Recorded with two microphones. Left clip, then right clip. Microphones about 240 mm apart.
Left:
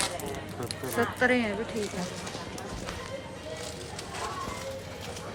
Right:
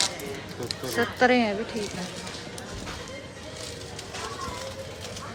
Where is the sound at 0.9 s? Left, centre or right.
Centre.